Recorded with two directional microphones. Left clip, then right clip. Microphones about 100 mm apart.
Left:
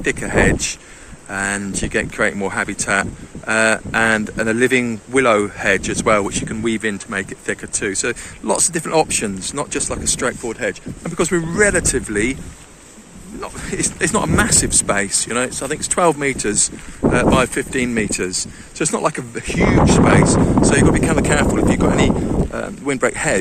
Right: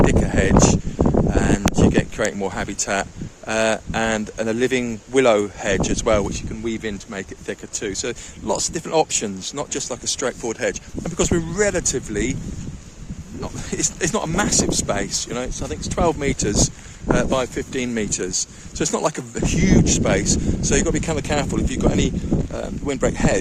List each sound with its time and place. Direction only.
0.0 s speech: 35° right (ahead or behind)
6.7 s speech: 20° right (ahead or behind)
10.4 s speech: 55° right (ahead or behind)
11.2 s speech: 35° right (ahead or behind)
11.5 s speech: 20° right (ahead or behind)
13.7 s speech: 40° right (ahead or behind)
14.3 s speech: 20° right (ahead or behind)
15.5 s speech: centre (ahead or behind)
16.0 s speech: 15° right (ahead or behind)
16.2 s speech: 35° right (ahead or behind)
17.3 s speech: 20° right (ahead or behind)
18.8 s speech: 45° right (ahead or behind); by 23.4 s 15° right (ahead or behind)